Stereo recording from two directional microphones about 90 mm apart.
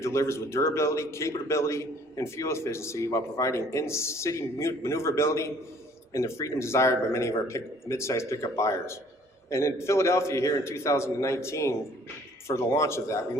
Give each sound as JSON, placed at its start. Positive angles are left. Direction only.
{"t": 0.0, "sound": "a man's voice", "side_deg": 30}